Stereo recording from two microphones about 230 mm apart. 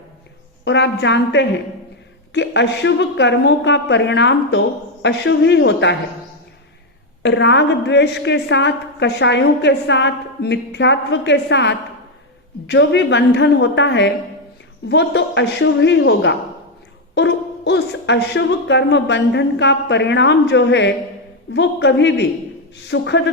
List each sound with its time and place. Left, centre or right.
0.6 s a woman's voice: left
7.2 s a woman's voice: left